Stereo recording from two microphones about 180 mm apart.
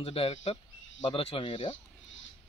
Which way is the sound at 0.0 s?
30° left (ahead or behind).